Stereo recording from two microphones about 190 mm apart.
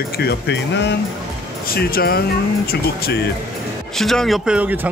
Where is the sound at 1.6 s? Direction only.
50° left (ahead or behind).